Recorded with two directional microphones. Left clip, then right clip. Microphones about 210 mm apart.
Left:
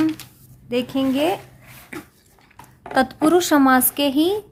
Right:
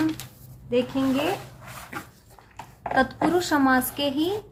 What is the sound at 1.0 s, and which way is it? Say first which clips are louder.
Speech: left 4 dB; 50° left (ahead or behind).